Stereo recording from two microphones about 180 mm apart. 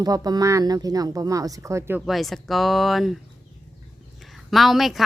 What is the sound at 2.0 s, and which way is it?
A woman's voice, centre (ahead or behind).